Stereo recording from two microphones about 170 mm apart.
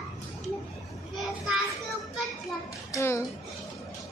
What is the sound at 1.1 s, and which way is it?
Children playing, centre (ahead or behind).